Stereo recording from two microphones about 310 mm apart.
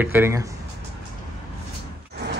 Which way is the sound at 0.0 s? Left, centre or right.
Centre.